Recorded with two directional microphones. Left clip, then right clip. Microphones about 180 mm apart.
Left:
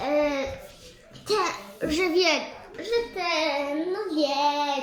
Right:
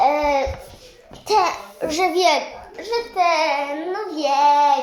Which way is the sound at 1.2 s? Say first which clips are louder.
Right 8 dB; 25° left (ahead or behind).